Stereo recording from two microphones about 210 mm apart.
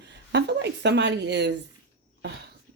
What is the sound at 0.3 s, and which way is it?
A woman's voice, 55° right (ahead or behind).